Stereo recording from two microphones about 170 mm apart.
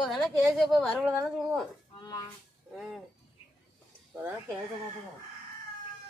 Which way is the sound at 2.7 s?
Centre (ahead or behind).